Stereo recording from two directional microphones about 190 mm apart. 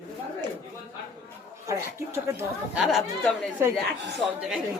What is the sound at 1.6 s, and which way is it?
Speech, 15° right (ahead or behind).